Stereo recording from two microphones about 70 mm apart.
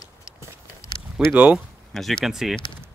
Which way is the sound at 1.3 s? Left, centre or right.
Centre.